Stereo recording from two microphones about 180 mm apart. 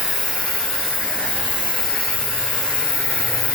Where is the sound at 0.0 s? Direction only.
Centre (ahead or behind).